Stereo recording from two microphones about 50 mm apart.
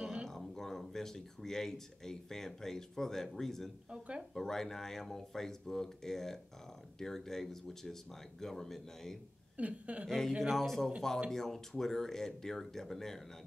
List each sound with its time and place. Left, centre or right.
0.0 s a sound: centre
0.3 s speech: centre
3.9 s a woman's voice: centre
4.3 s speech: centre
9.6 s a woman's voice: right
10.0 s speech: centre